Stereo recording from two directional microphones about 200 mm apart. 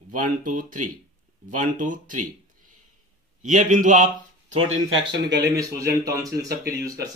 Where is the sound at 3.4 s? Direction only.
40° right (ahead or behind).